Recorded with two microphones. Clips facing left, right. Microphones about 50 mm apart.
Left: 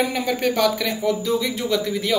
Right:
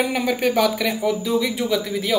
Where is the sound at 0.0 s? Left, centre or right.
Centre.